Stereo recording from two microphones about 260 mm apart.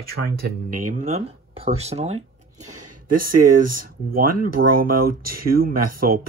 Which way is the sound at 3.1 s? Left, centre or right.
Right.